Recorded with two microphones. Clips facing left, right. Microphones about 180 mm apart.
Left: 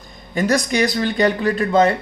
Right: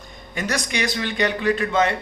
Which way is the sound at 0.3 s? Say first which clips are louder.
Left 8 dB; 35° left (ahead or behind).